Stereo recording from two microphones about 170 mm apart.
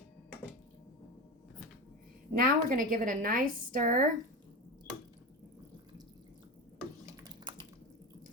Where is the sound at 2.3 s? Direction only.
55° right (ahead or behind).